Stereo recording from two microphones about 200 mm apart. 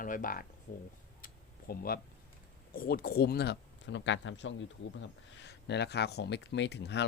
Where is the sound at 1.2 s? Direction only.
45° left (ahead or behind).